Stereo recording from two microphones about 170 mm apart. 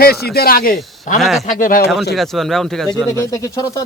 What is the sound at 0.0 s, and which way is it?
Speech, 65° left (ahead or behind).